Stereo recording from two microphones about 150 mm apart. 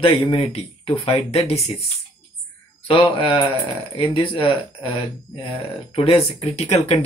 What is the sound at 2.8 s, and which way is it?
Speech, 35° left (ahead or behind).